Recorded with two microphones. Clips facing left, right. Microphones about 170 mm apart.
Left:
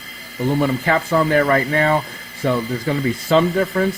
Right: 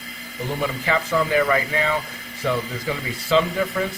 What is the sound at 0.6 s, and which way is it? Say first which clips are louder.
Speech: left 1 dB; 50° left (ahead or behind).